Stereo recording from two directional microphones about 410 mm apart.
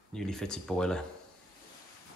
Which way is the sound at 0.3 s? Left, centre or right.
Centre.